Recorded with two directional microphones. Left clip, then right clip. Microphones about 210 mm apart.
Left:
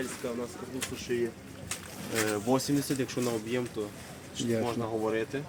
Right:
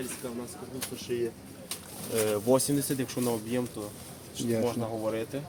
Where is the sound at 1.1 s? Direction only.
40° right (ahead or behind); by 3.6 s 60° right (ahead or behind).